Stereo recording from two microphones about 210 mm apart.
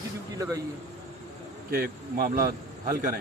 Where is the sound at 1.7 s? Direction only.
45° right (ahead or behind).